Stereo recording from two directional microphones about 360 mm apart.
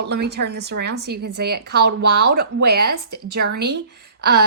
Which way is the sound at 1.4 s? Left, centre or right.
Right.